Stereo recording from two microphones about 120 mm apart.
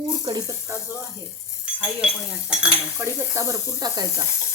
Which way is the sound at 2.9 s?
25° right (ahead or behind).